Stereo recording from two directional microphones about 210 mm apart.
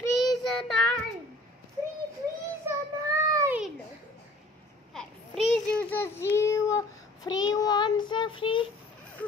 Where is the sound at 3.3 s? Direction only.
15° right (ahead or behind).